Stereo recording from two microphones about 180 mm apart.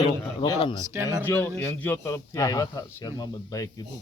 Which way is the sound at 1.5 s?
10° left (ahead or behind).